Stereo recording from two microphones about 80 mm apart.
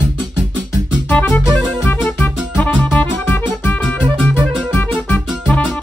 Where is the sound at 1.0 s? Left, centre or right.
Centre.